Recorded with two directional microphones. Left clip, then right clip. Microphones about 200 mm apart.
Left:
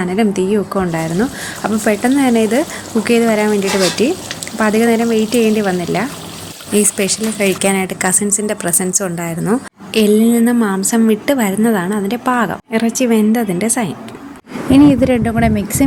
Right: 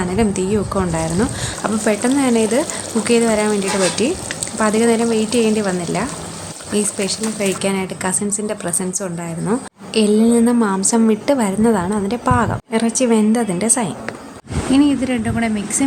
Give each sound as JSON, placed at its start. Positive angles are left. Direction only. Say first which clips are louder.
{"t": 0.0, "sound": "speech", "louder": "left 3 dB", "side_deg": 15}
{"t": 9.9, "sound": "a woman's voice", "louder": "left 2 dB", "side_deg": 5}
{"t": 14.7, "sound": "speech", "louder": "left 6 dB", "side_deg": 20}